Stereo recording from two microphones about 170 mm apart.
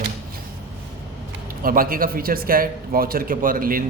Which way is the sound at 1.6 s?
60° right (ahead or behind).